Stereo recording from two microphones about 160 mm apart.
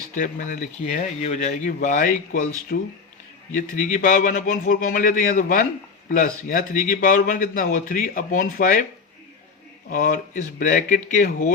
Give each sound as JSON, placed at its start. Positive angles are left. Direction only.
{"t": 0.1, "sound": "a man's voice", "side_deg": 50}
{"t": 9.9, "sound": "a man's voice", "side_deg": 55}